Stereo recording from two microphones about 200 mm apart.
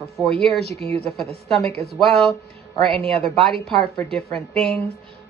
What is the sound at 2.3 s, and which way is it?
Speech, centre (ahead or behind).